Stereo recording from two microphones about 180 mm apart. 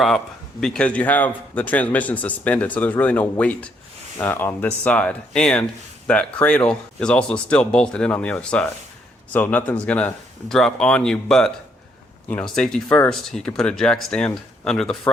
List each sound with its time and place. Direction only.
0.6 s speech: 5° left (ahead or behind)